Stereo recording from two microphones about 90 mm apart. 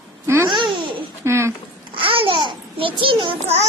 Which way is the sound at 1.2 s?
30° right (ahead or behind).